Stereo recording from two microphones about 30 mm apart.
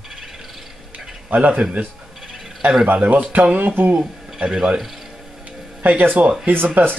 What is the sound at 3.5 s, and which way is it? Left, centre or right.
Speech, right.